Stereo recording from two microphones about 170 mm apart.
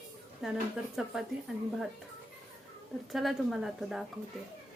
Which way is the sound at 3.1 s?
Centre (ahead or behind).